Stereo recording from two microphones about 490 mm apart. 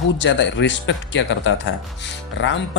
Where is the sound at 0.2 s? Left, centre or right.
Left.